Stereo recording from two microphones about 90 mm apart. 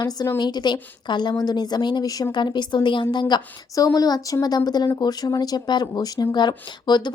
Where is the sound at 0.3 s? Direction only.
50° left (ahead or behind).